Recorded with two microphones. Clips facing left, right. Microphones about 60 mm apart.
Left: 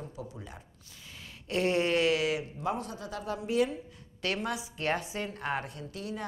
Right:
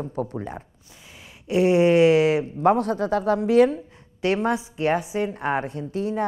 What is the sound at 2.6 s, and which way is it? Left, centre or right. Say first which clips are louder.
Speech: right 14 dB; right.